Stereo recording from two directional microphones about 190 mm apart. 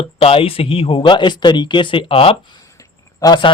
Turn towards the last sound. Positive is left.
turn(degrees=25)  # may be behind; listen again after turning